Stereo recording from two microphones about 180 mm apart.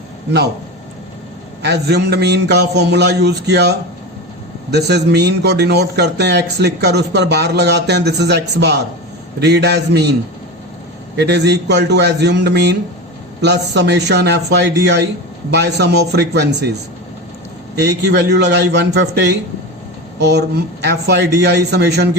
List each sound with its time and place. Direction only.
1.6 s a man's voice: 65° right (ahead or behind)
11.2 s a man's voice: 70° right (ahead or behind)
17.7 s a man's voice: 70° right (ahead or behind)